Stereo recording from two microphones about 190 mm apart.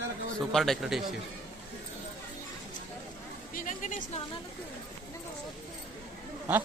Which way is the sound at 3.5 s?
45° left (ahead or behind).